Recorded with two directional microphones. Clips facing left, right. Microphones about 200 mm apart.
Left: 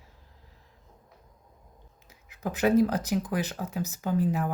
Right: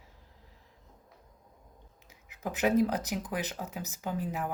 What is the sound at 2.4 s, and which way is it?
Speech, 15° right (ahead or behind).